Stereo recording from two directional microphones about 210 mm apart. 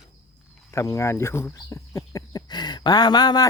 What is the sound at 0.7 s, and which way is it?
Speech, 15° left (ahead or behind).